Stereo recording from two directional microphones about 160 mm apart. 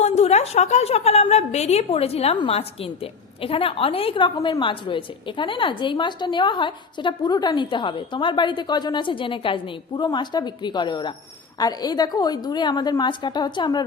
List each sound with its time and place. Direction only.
0.0 s a woman's voice: 40° left (ahead or behind)
4.4 s a woman's voice: 20° left (ahead or behind)
4.6 s a woman's voice: 30° left (ahead or behind)